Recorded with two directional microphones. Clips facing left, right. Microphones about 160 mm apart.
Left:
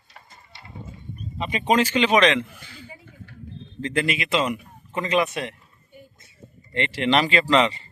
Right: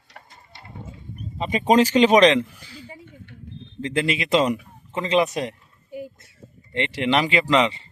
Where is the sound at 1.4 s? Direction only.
40° right (ahead or behind).